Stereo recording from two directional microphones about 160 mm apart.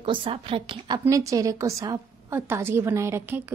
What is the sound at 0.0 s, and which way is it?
A woman's voice, 35° right (ahead or behind).